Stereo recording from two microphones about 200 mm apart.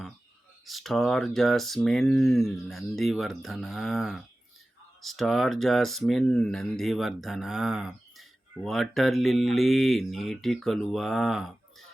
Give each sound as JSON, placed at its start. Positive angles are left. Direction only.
{"t": 0.6, "sound": "speech", "side_deg": 0}